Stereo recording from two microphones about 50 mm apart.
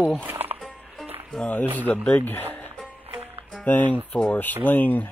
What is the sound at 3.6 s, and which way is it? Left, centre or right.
Speech, left.